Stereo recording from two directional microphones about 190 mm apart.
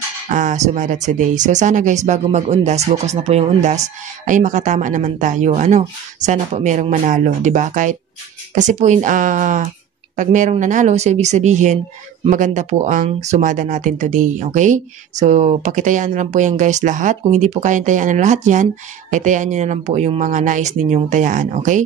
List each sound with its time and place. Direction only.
0.3 s speech: 40° right (ahead or behind)